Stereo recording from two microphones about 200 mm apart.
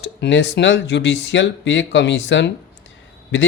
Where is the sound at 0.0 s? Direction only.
60° left (ahead or behind).